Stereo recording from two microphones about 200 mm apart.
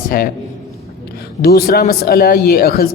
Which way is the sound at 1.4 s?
50° left (ahead or behind).